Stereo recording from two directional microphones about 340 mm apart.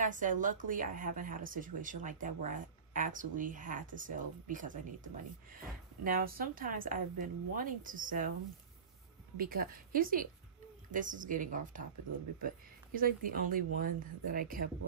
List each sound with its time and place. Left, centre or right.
0.0 s a woman's voice: right
9.4 s a woman's voice: right